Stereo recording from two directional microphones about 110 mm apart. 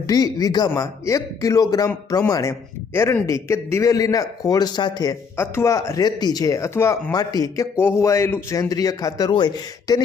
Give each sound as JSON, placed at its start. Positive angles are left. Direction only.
{"t": 0.1, "sound": "a man's voice", "side_deg": 35}
{"t": 5.4, "sound": "speech", "side_deg": 25}
{"t": 7.1, "sound": "a man's voice", "side_deg": 35}